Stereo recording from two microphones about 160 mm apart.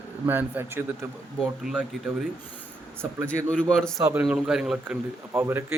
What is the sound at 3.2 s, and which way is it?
Speech, 5° left (ahead or behind).